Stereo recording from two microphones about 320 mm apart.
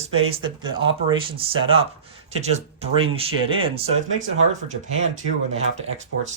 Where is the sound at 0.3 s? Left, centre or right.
Centre.